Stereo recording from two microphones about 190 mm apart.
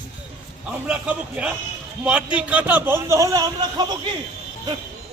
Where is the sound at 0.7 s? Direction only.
5° right (ahead or behind); by 3.9 s 20° right (ahead or behind).